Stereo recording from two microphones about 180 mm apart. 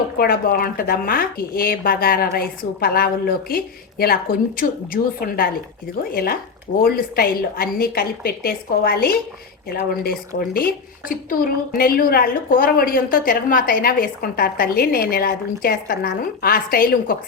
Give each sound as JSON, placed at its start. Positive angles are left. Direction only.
{"t": 0.2, "sound": "a woman's voice", "side_deg": 55}